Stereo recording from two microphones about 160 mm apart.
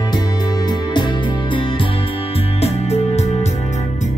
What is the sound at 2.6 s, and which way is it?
Music, 40° left (ahead or behind).